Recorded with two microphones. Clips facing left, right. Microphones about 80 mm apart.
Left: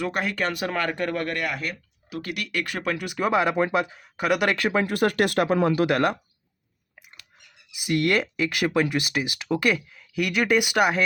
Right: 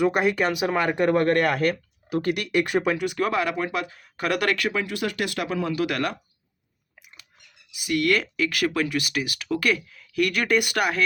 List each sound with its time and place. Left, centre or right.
0.0 s speech: centre
1.4 s speech: right
2.1 s speech: right
2.8 s speech: centre
3.1 s speech: centre
4.5 s speech: left
7.9 s speech: left